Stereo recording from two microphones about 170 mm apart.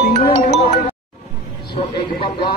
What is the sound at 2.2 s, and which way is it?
Speech, 30° left (ahead or behind).